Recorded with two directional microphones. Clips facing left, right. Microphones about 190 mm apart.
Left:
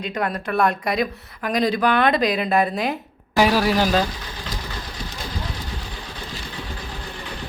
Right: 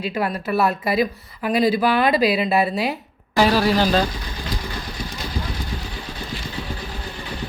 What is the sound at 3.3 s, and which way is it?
Speech, 10° left (ahead or behind).